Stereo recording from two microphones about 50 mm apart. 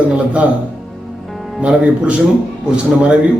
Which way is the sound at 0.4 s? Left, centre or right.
Right.